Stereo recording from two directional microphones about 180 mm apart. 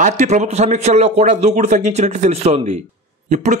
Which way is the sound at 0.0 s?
40° right (ahead or behind).